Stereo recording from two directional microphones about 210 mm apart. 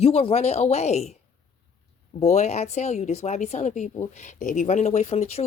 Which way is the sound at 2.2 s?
30° left (ahead or behind).